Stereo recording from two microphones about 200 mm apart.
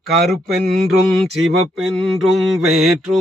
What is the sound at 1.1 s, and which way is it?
Mantra, centre (ahead or behind).